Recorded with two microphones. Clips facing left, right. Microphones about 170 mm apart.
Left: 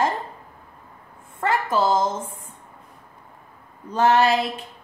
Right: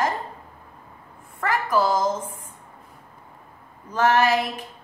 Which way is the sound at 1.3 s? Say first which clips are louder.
Left 1 dB; 25° left (ahead or behind).